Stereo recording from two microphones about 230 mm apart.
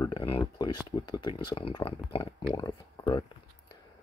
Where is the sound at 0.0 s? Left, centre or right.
Left.